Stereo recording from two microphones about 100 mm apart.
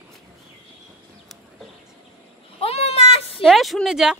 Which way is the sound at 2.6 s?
85° left.